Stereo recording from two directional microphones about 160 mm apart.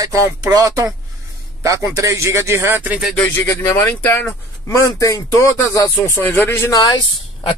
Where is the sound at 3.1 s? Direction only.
15° left (ahead or behind).